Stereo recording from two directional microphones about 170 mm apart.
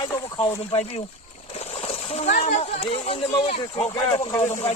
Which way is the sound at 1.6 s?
35° left (ahead or behind).